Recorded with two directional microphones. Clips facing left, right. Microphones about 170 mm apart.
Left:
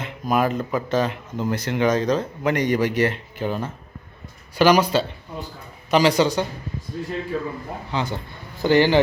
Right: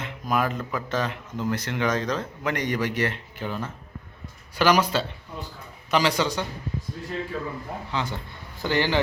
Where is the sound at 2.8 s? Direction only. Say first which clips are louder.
Left 6 dB; 10° left (ahead or behind).